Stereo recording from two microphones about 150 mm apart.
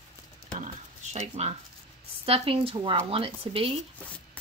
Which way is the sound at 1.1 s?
50° right (ahead or behind).